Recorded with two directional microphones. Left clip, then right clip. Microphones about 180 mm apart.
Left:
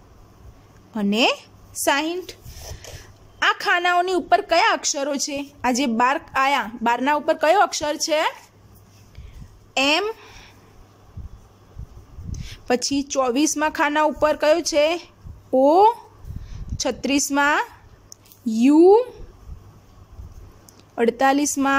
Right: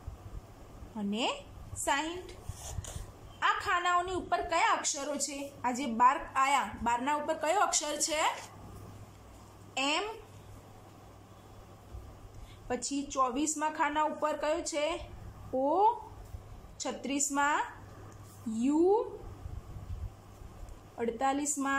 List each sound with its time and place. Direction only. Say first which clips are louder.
0.9 s speech: left 14 dB; 60° left (ahead or behind)
3.3 s a woman's voice: left 10 dB; 60° left (ahead or behind)
9.8 s speech: left 12 dB; 55° left (ahead or behind)
12.6 s speech: left 14 dB; 55° left (ahead or behind)
20.9 s speech: left 13 dB; 60° left (ahead or behind)